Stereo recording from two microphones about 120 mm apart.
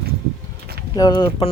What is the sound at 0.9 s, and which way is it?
Speech, 35° left (ahead or behind).